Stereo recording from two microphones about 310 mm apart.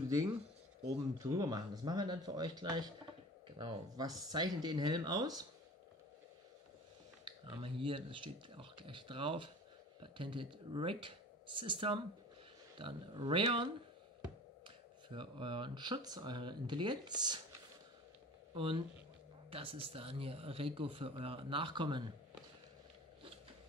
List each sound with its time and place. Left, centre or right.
0.8 s speech: centre
7.2 s speech: centre
15.0 s speech: centre
18.5 s speech: centre